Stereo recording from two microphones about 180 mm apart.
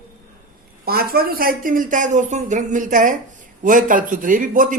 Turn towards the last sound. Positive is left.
turn(degrees=-45)  # may be behind; listen again after turning